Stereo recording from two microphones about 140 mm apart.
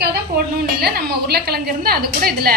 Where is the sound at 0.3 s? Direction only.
90° right.